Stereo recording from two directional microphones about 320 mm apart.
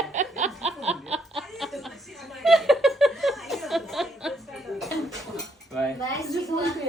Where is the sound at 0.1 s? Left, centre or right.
Right.